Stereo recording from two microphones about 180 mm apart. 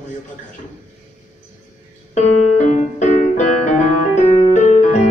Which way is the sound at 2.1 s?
40° left (ahead or behind).